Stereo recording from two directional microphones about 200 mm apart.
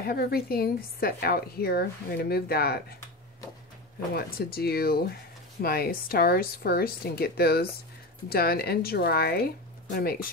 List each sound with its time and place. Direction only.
0.0 s a woman's voice: 50° left (ahead or behind)
4.1 s a woman's voice: 50° left (ahead or behind)